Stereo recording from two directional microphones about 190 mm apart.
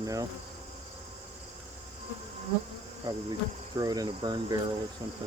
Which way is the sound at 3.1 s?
20° right (ahead or behind).